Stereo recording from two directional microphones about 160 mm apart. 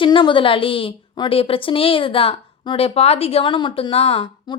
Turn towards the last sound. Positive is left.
turn(degrees=30)  # may be behind; listen again after turning